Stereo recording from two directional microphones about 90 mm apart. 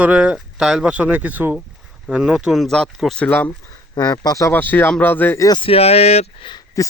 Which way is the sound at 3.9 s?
45° left (ahead or behind).